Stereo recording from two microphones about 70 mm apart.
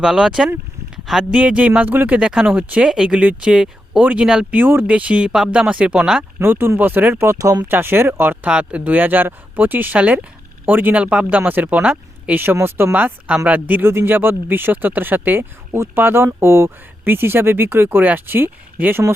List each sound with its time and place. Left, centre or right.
0.0 s speech: centre
4.5 s speech: right
4.9 s speech: centre
6.4 s speech: right
8.4 s speech: centre; by 12.9 s right
12.9 s speech: centre
13.5 s speech: right